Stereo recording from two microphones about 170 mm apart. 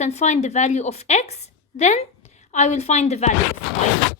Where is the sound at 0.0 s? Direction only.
40° left (ahead or behind).